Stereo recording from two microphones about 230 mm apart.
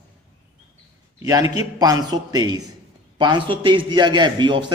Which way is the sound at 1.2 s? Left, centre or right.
Centre.